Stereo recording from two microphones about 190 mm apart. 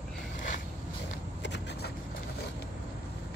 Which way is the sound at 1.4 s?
65° left (ahead or behind).